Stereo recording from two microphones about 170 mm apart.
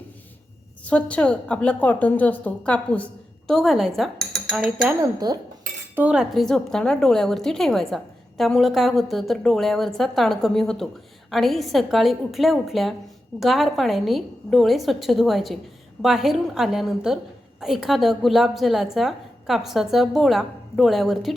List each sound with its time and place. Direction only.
0.9 s a woman's voice: 5° left (ahead or behind)
5.2 s speech: 25° right (ahead or behind)
6.0 s a woman's voice: 5° right (ahead or behind)